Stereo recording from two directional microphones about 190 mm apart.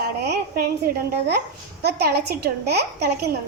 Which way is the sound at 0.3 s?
55° right (ahead or behind).